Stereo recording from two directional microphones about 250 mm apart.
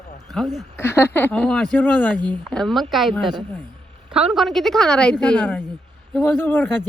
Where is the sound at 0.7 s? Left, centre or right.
Centre.